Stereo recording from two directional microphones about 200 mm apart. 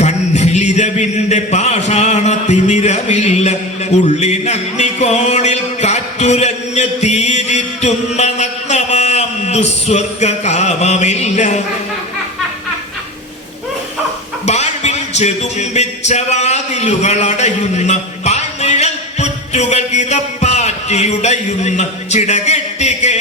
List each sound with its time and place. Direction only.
0.0 s a sound: 35° left (ahead or behind)
4.0 s music: 35° left (ahead or behind)
14.4 s speech: 35° left (ahead or behind)